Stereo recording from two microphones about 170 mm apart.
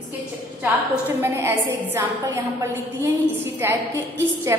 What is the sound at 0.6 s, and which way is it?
A woman's voice, 10° right (ahead or behind).